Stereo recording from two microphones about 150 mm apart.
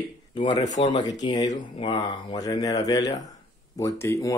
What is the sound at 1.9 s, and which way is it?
Speech, 25° left (ahead or behind).